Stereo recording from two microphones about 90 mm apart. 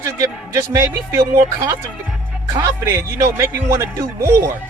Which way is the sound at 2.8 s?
30° right (ahead or behind).